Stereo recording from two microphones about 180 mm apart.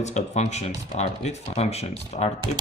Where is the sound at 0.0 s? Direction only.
40° left (ahead or behind).